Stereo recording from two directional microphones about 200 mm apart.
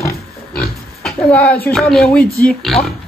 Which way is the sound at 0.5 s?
Centre (ahead or behind).